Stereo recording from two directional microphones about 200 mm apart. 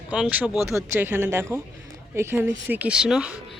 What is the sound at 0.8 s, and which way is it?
A woman's voice, 10° right (ahead or behind).